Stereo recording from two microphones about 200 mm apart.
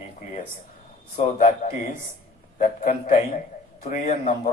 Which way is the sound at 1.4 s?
40° left (ahead or behind).